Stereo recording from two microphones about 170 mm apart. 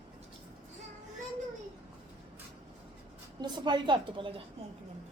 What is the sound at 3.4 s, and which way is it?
Speech, 25° right (ahead or behind).